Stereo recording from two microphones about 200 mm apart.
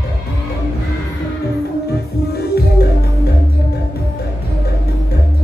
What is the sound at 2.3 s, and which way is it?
Music, 55° left (ahead or behind).